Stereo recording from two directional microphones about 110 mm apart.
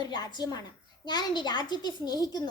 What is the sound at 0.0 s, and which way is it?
A woman's voice, 40° left (ahead or behind).